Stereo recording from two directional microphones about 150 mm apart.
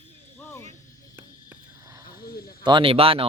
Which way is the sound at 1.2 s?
15° right (ahead or behind).